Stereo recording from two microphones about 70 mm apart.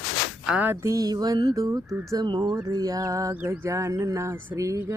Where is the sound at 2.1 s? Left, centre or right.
Right.